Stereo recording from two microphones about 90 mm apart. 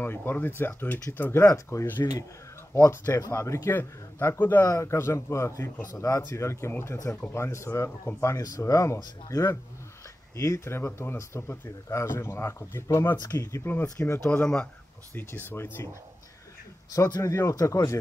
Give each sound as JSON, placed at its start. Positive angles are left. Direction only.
{"t": 0.0, "sound": "speech", "side_deg": 20}
{"t": 4.6, "sound": "speech", "side_deg": 35}
{"t": 14.3, "sound": "speech", "side_deg": 15}
{"t": 15.1, "sound": "speech", "side_deg": 25}
{"t": 16.9, "sound": "speech", "side_deg": 40}